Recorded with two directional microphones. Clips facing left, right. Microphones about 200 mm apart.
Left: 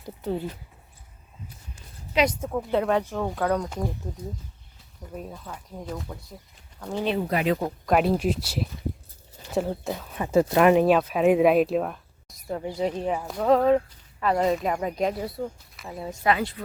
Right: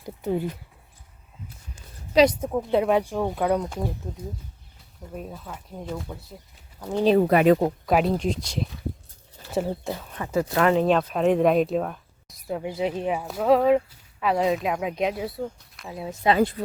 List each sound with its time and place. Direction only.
0.2 s speech: 10° right (ahead or behind)
2.1 s a woman's voice: 35° right (ahead or behind)
2.6 s speech: 15° right (ahead or behind)
3.7 s speech: centre (ahead or behind)
5.1 s speech: 5° right (ahead or behind)
7.2 s speech: 55° right (ahead or behind)
7.9 s speech: centre (ahead or behind)
10.2 s speech: 20° left (ahead or behind); by 16.1 s centre (ahead or behind)